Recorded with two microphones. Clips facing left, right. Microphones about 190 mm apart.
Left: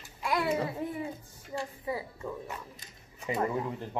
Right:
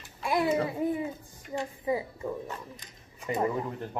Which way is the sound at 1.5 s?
20° right (ahead or behind).